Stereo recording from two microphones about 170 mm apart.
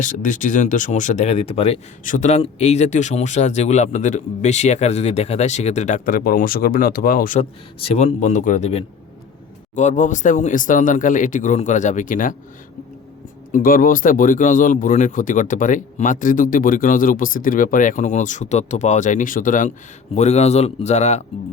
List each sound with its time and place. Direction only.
0.0 s speech: 50° left (ahead or behind)
2.0 s speech: 45° left (ahead or behind)
7.8 s speech: 35° left (ahead or behind)
13.5 s speech: 55° left (ahead or behind)